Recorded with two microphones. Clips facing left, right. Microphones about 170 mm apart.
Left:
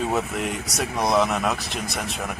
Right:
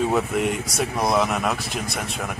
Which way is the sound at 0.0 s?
Centre (ahead or behind).